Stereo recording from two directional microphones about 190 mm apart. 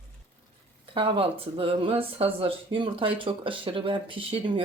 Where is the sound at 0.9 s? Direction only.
30° right (ahead or behind).